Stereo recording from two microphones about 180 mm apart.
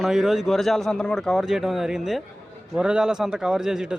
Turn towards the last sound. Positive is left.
turn(degrees=-5)  # may be behind; listen again after turning